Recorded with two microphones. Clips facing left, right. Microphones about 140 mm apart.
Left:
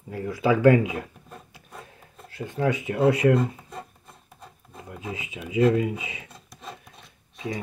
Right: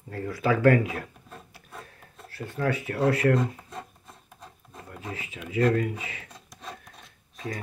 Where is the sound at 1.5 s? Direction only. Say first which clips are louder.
Left 1 dB; 20° left (ahead or behind).